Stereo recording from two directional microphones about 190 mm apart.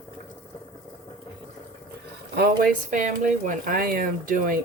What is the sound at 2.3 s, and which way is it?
Speech, 50° right (ahead or behind).